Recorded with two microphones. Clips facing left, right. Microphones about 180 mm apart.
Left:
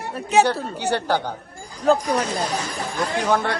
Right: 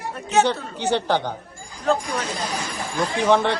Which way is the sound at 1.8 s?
35° left (ahead or behind).